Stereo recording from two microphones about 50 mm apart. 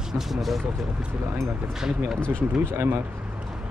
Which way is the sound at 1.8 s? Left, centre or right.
Centre.